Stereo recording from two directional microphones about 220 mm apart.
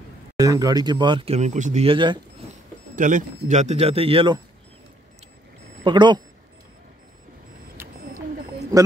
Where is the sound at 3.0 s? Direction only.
35° right (ahead or behind).